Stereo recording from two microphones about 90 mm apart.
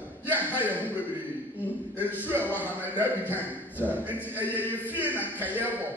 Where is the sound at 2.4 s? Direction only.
20° left (ahead or behind).